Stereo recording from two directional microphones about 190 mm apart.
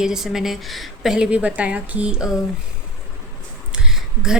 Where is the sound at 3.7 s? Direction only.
5° right (ahead or behind).